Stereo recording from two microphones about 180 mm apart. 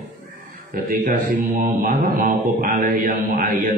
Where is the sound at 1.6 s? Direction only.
50° right (ahead or behind).